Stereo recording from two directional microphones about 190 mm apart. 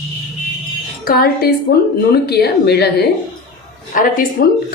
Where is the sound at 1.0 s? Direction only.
55° left (ahead or behind).